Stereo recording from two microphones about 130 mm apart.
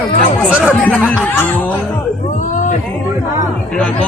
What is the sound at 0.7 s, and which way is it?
Speech, 10° left (ahead or behind).